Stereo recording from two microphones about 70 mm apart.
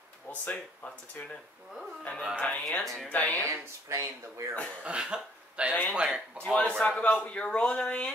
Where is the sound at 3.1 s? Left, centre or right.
Left.